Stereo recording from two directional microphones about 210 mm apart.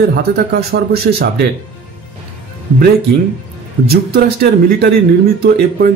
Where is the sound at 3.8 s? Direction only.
50° right (ahead or behind).